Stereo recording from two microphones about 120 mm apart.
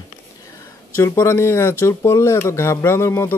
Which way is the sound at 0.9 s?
20° left (ahead or behind).